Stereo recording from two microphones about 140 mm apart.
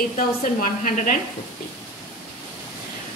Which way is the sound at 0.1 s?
65° left (ahead or behind).